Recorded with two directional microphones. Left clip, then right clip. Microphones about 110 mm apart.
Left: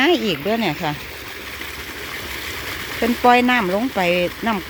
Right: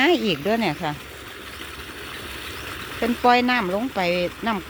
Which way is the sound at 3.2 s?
15° left (ahead or behind).